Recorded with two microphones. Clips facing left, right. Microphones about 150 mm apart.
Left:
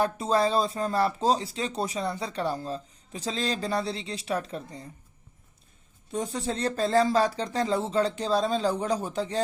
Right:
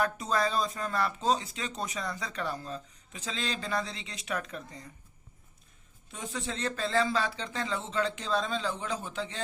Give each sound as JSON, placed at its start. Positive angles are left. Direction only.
{"t": 0.0, "sound": "speech", "side_deg": 30}
{"t": 6.1, "sound": "speech", "side_deg": 40}